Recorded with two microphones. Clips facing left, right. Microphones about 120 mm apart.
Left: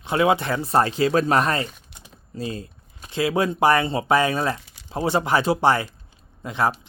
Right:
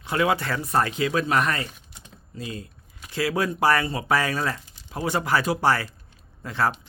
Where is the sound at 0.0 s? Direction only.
25° left (ahead or behind).